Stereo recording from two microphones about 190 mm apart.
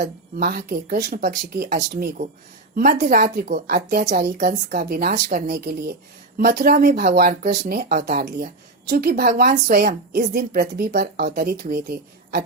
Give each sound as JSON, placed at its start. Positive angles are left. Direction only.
{"t": 0.3, "sound": "a woman's voice", "side_deg": -55}